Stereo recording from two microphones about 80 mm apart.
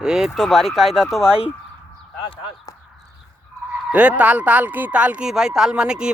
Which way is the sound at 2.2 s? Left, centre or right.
Left.